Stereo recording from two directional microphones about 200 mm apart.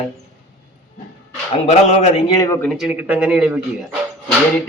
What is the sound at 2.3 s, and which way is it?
Speech, 15° left (ahead or behind).